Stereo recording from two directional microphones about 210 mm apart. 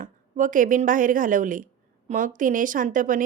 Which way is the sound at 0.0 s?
40° right (ahead or behind).